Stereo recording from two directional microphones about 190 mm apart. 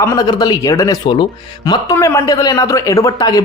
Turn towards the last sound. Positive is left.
turn(degrees=15)  # may be behind; listen again after turning